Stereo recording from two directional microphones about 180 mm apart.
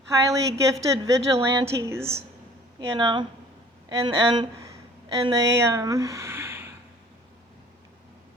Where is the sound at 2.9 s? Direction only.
25° right (ahead or behind).